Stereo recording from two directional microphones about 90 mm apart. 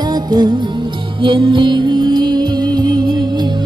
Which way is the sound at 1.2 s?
65° right (ahead or behind).